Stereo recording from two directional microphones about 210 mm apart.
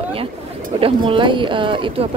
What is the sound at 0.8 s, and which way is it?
Speech, 25° right (ahead or behind).